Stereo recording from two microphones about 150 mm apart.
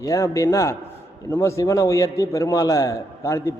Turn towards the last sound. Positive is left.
turn(degrees=20)  # may be behind; listen again after turning